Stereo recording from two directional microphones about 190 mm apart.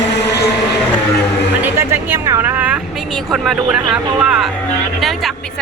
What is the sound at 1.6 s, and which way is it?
A woman's voice, 10° right (ahead or behind).